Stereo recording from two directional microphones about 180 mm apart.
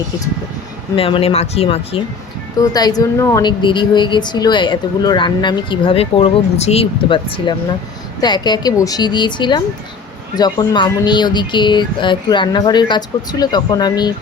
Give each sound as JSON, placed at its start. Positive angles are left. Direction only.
{"t": 0.9, "sound": "speech", "side_deg": 30}
{"t": 2.6, "sound": "a woman's voice", "side_deg": 20}